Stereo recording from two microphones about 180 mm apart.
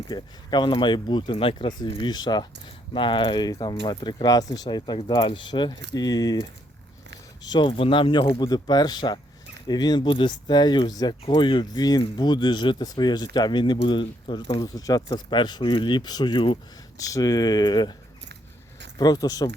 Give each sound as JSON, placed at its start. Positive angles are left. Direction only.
{"t": 0.1, "sound": "speech", "side_deg": 25}
{"t": 18.9, "sound": "speech", "side_deg": 20}